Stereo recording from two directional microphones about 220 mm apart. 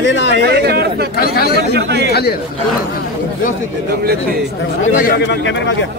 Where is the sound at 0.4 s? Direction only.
45° right (ahead or behind).